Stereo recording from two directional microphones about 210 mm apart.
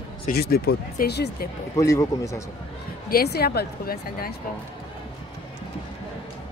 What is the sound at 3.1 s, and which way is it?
Speech, 50° left (ahead or behind).